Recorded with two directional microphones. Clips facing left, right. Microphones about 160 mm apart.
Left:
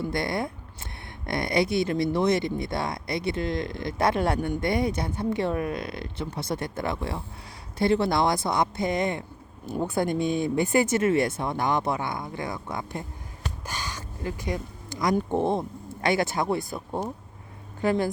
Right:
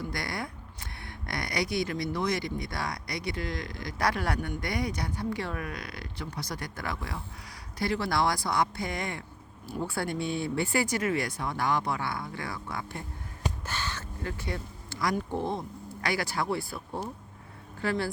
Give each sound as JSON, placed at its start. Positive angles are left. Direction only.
{"t": 0.0, "sound": "speech", "side_deg": 25}
{"t": 13.7, "sound": "a sound", "side_deg": 10}
{"t": 15.3, "sound": "speech", "side_deg": 55}
{"t": 16.0, "sound": "speech", "side_deg": 25}